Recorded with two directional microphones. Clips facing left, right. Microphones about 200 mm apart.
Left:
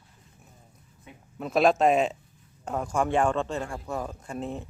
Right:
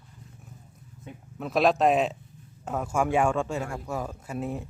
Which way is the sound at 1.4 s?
Centre (ahead or behind).